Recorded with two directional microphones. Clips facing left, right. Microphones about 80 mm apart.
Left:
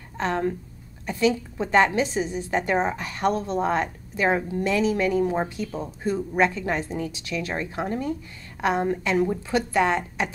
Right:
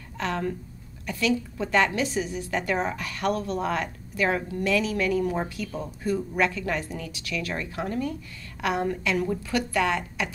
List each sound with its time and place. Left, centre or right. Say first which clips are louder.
0.2 s a woman's voice: left 4 dB; left